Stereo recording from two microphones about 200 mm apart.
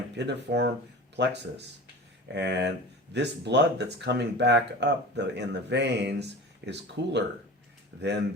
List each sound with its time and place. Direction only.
0.2 s speech: 60° right (ahead or behind)